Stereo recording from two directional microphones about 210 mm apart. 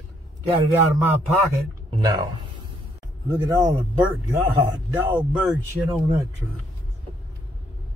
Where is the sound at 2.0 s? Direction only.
20° right (ahead or behind).